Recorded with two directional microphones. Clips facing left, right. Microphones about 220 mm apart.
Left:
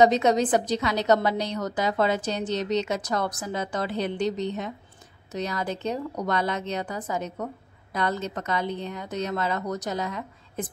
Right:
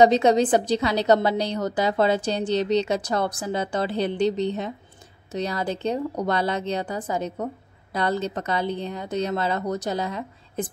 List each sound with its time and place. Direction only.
0.0 s a woman's voice: 30° right (ahead or behind)